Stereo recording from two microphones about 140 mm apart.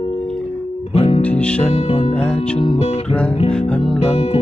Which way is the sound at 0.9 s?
40° left (ahead or behind).